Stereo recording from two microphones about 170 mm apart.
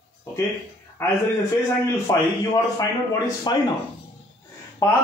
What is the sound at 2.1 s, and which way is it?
Speech, 20° left (ahead or behind).